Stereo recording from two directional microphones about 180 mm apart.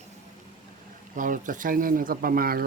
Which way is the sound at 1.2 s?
45° right (ahead or behind).